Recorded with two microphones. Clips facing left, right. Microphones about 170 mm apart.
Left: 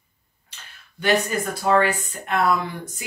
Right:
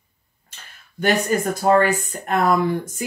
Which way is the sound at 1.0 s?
45° right (ahead or behind).